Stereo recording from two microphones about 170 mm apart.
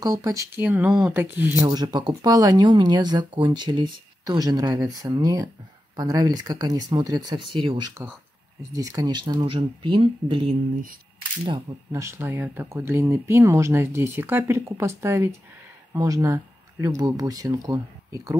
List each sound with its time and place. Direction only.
0.0 s speech: 20° right (ahead or behind)
1.7 s speech: 25° right (ahead or behind)